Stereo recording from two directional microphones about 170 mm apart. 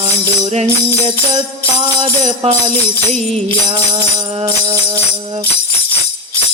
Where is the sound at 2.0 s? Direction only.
40° right (ahead or behind).